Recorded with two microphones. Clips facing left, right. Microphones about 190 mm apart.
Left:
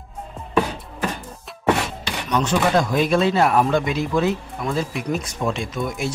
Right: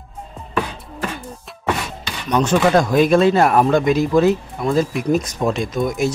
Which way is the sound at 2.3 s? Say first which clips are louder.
Right 4 dB; 45° right (ahead or behind).